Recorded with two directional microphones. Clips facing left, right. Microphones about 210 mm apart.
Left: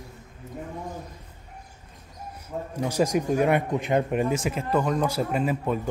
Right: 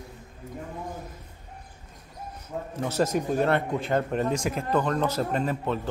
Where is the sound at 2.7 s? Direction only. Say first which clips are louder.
Left 2 dB; 10° left (ahead or behind).